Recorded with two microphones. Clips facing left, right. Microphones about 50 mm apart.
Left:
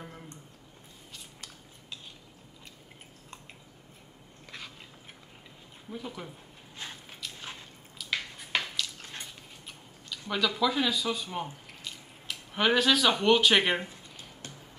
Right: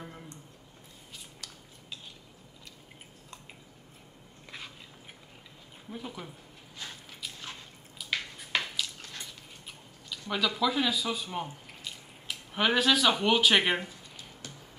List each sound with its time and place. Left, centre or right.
5.9 s speech: centre
6.8 s biting: left
7.3 s biting: centre
8.0 s a sound: centre
9.0 s drip: left
9.7 s a sound: centre
10.3 s speech: centre